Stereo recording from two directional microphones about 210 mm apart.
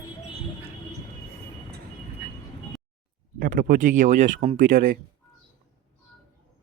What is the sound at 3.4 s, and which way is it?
Speech, 40° right (ahead or behind).